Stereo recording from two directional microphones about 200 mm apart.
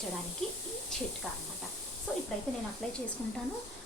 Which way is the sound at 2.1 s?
5° left (ahead or behind).